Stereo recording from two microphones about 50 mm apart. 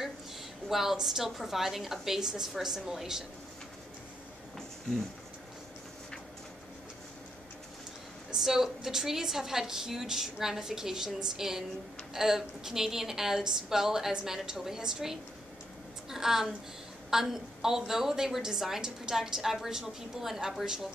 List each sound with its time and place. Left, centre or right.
0.7 s a woman's voice: centre
8.3 s a woman's voice: centre